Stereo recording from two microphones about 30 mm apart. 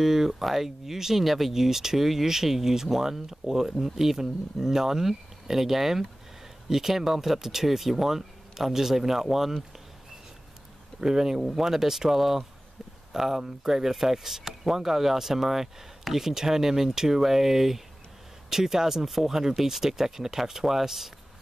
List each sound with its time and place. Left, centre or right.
0.0 s speech: centre
11.0 s speech: centre